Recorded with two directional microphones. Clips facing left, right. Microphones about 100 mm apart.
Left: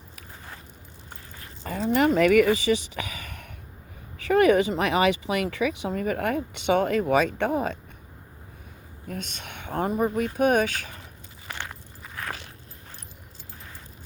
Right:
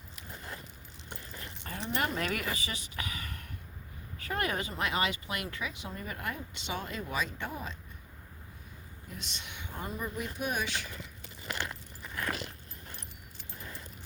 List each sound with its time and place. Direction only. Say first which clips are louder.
1.9 s speech: left 14 dB; 90° left; by 7.8 s 65° left (ahead or behind)
9.0 s speech: left 10 dB; 50° left (ahead or behind)